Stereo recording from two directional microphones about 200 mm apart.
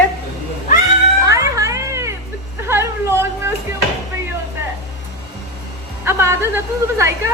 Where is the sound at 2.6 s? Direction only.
10° right (ahead or behind).